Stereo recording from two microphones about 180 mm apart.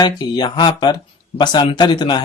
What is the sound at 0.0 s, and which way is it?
Speech, 25° left (ahead or behind).